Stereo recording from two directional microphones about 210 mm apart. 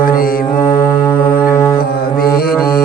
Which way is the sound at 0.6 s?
10° left (ahead or behind).